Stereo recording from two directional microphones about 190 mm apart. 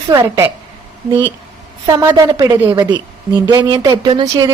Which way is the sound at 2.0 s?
15° right (ahead or behind).